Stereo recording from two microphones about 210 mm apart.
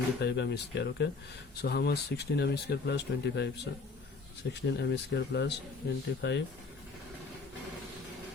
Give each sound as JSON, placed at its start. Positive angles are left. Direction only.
{"t": 0.2, "sound": "speech", "side_deg": 55}